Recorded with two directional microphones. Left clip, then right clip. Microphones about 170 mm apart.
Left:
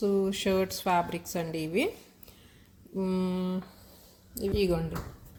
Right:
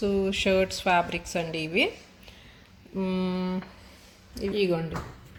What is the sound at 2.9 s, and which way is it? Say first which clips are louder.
A woman's voice: right 2 dB; 5° left (ahead or behind).